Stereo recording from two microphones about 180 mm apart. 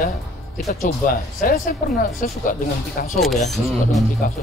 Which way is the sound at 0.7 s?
50° left (ahead or behind).